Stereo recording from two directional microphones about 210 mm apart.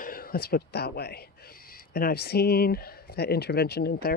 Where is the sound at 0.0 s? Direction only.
45° left (ahead or behind).